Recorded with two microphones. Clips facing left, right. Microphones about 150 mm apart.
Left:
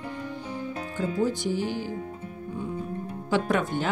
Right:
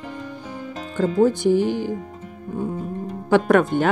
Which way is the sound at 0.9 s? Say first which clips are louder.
Right 9 dB; 65° right (ahead or behind).